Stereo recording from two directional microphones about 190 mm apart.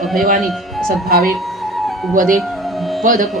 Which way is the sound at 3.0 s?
45° right (ahead or behind).